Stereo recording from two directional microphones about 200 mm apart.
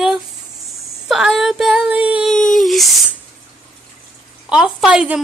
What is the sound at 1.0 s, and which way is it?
Female singing, centre (ahead or behind).